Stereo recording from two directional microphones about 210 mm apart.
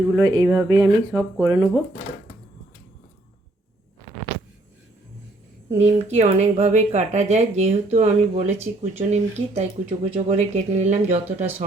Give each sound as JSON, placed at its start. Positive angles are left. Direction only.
{"t": 0.3, "sound": "speech", "side_deg": -15}
{"t": 5.7, "sound": "speech", "side_deg": -30}